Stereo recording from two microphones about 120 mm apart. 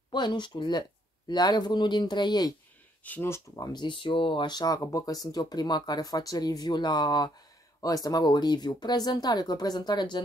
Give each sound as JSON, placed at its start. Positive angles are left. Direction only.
{"t": 0.1, "sound": "speech", "side_deg": 40}
{"t": 3.0, "sound": "speech", "side_deg": 15}